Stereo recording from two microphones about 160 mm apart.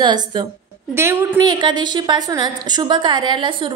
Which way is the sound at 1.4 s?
30° right (ahead or behind).